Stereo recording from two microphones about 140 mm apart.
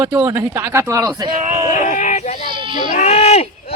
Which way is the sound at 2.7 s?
60° left (ahead or behind).